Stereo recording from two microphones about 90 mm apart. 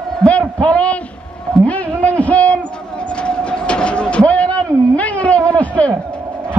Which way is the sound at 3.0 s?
10° left (ahead or behind).